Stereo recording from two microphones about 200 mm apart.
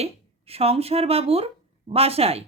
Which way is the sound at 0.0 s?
30° right (ahead or behind).